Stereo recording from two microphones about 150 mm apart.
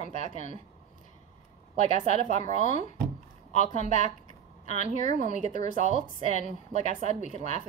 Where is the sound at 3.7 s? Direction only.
50° right (ahead or behind).